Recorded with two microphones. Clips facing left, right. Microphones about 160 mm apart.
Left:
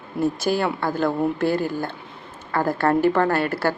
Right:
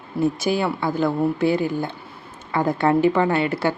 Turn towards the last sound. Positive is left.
turn(degrees=-15)  # may be behind; listen again after turning